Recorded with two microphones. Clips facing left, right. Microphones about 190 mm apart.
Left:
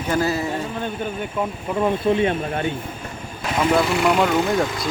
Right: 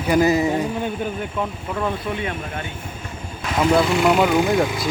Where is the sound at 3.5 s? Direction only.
Centre (ahead or behind).